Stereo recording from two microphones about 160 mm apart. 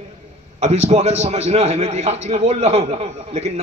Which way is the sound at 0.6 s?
45° right (ahead or behind).